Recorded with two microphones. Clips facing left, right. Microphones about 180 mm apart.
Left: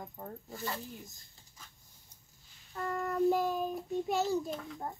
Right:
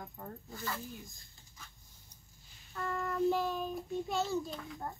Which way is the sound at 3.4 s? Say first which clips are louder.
Left 3 dB; 10° left (ahead or behind).